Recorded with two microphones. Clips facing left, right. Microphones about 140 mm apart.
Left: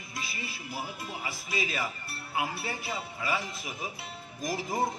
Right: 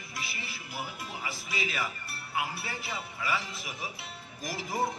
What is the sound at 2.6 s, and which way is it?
A man's voice, 45° left (ahead or behind).